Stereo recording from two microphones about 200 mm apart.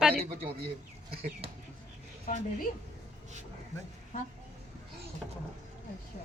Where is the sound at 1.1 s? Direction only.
30° right (ahead or behind).